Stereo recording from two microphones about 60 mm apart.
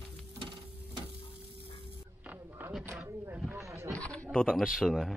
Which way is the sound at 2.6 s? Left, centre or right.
Right.